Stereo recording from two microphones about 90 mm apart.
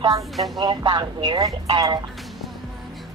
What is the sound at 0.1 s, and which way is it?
Speech, 40° right (ahead or behind).